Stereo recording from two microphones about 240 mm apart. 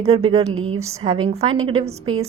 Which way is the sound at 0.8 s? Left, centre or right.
Right.